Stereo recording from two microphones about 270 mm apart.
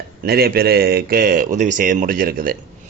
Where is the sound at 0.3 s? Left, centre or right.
Right.